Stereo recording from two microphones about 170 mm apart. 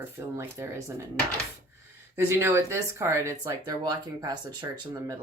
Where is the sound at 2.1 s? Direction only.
15° right (ahead or behind).